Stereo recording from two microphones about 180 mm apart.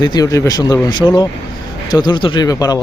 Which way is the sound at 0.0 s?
20° left (ahead or behind).